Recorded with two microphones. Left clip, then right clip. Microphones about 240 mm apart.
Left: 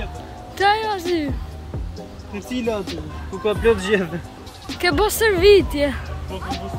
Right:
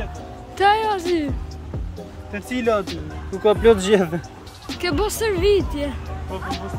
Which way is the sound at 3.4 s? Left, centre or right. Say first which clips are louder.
Right 3 dB; right.